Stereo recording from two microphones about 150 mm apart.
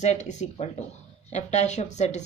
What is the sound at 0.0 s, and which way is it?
A woman's voice, 50° left (ahead or behind).